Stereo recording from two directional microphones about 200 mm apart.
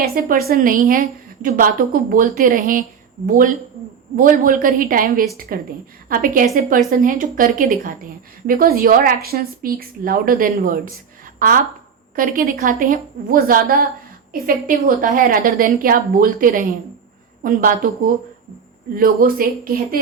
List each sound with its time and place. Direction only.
0.0 s a woman's voice: 45° right (ahead or behind)